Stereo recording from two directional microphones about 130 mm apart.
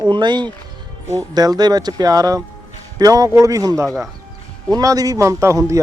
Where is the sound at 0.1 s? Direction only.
35° right (ahead or behind).